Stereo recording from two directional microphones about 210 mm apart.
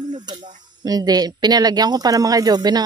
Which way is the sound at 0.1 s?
20° right (ahead or behind).